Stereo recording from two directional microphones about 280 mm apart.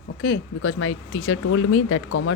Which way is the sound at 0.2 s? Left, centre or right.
Left.